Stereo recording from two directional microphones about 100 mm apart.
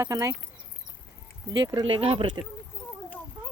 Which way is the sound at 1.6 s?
45° right (ahead or behind).